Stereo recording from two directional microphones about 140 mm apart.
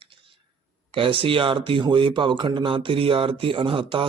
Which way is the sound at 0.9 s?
40° right (ahead or behind).